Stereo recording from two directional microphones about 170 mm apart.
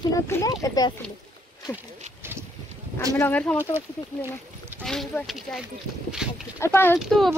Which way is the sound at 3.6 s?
15° right (ahead or behind).